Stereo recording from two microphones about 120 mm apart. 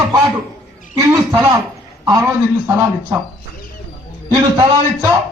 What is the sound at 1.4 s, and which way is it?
Speech, 20° right (ahead or behind).